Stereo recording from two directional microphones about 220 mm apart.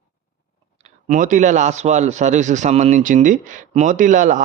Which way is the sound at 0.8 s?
35° right (ahead or behind).